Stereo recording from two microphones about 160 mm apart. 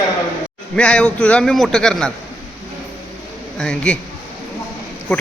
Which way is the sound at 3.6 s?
5° left (ahead or behind).